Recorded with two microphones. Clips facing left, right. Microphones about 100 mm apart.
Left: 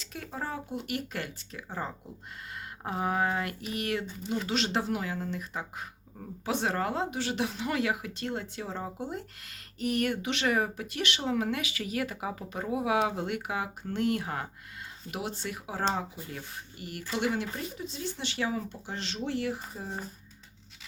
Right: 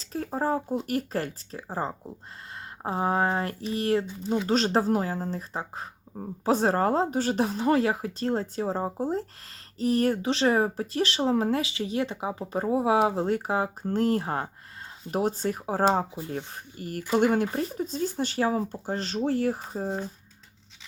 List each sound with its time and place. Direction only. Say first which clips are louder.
0.0 s speech: right 9 dB; 35° right (ahead or behind)